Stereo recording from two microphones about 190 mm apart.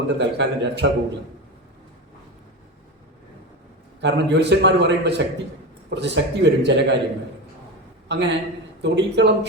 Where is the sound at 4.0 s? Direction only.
65° right (ahead or behind).